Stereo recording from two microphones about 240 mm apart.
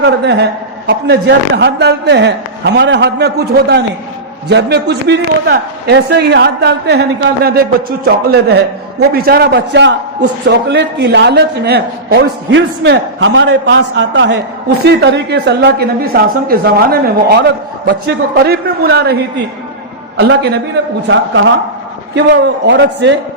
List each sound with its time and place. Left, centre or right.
0.0 s a man's voice: right
20.1 s a man's voice: right